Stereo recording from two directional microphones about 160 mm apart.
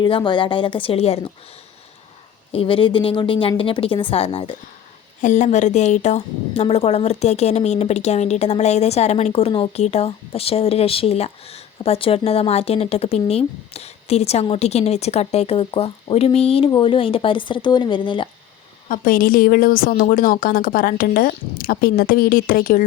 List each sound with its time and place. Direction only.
0.0 s a woman's voice: 30° left (ahead or behind)
2.5 s a woman's voice: 35° left (ahead or behind)
5.2 s a woman's voice: 50° left (ahead or behind); by 18.3 s 30° left (ahead or behind)
18.9 s speech: 60° left (ahead or behind)